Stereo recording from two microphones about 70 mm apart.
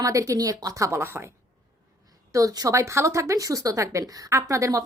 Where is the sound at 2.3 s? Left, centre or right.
Right.